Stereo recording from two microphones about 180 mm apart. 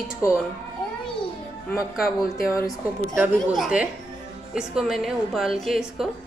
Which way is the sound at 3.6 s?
5° right (ahead or behind).